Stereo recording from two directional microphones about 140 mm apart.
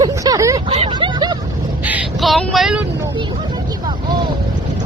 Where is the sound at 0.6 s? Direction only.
40° right (ahead or behind).